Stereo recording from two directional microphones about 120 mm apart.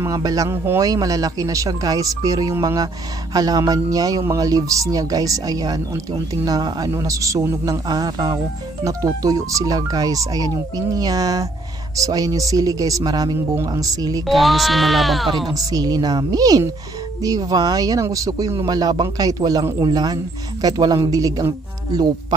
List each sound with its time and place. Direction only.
0.0 s a man's voice: 30° right (ahead or behind)
14.2 s speech: centre (ahead or behind)
15.5 s speech: 30° right (ahead or behind)